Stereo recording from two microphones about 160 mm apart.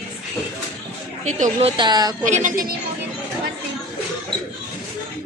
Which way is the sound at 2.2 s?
50° right (ahead or behind).